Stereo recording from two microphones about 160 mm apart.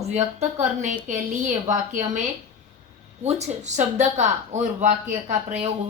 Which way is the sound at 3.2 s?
45° right (ahead or behind).